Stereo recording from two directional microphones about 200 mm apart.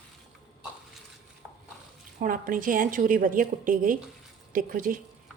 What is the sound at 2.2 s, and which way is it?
A woman's voice, 45° right (ahead or behind).